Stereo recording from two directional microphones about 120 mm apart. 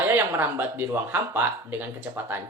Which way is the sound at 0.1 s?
15° right (ahead or behind).